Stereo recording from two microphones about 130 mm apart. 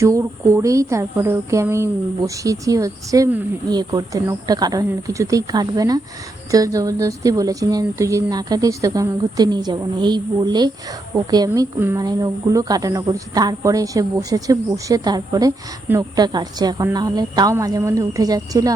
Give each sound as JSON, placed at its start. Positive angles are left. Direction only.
{"t": 0.0, "sound": "a woman's voice", "side_deg": -20}